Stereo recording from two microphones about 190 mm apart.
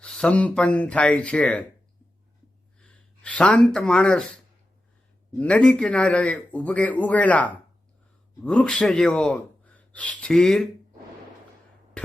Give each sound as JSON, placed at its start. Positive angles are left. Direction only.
{"t": 0.0, "sound": "speech", "side_deg": 5}
{"t": 2.8, "sound": "speech", "side_deg": 5}
{"t": 5.4, "sound": "a man's voice", "side_deg": 5}
{"t": 12.0, "sound": "a sound", "side_deg": 5}